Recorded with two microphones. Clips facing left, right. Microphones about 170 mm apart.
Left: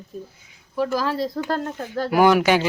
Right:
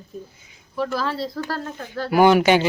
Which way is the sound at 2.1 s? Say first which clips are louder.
Right 2 dB; centre (ahead or behind).